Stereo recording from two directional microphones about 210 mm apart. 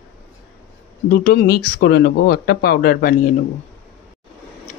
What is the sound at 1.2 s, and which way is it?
Speech, 50° left (ahead or behind).